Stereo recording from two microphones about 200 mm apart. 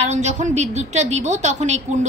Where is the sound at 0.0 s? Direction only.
35° right (ahead or behind).